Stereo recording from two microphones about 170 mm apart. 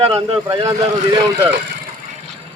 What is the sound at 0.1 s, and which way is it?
Speech, 20° right (ahead or behind).